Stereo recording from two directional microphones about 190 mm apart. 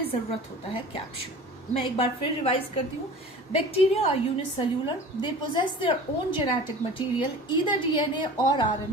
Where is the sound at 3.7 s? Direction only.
30° left (ahead or behind).